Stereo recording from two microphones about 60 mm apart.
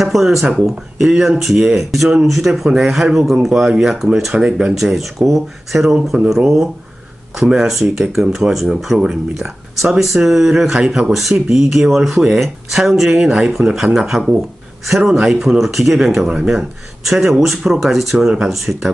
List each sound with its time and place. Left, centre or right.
0.0 s speech: centre
4.7 s speech: centre
5.9 s speech: centre